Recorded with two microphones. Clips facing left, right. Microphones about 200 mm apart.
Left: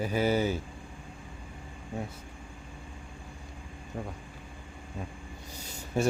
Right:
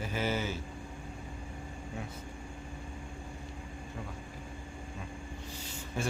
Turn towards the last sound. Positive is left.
turn(degrees=40)  # may be behind; listen again after turning